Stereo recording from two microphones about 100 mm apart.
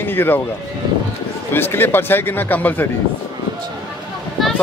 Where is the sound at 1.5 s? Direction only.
20° left (ahead or behind).